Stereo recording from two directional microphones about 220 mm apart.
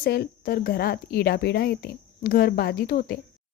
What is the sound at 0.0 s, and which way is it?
Speech, 45° left (ahead or behind).